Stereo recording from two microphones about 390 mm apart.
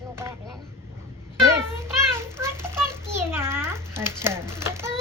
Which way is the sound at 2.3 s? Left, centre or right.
Centre.